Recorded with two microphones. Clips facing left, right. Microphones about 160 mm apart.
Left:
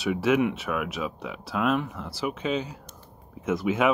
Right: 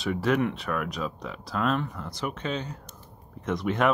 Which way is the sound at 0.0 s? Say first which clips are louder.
Left 2 dB; 5° left (ahead or behind).